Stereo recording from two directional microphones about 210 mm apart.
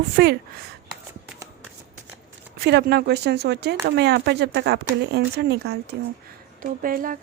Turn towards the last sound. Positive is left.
turn(degrees=-40)  # may be behind; listen again after turning